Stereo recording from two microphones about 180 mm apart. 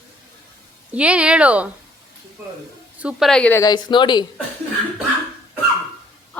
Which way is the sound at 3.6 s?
25° left (ahead or behind).